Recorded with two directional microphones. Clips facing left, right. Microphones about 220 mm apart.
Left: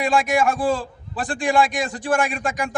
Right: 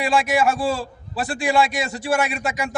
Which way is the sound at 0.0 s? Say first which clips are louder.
Even; 5° right (ahead or behind).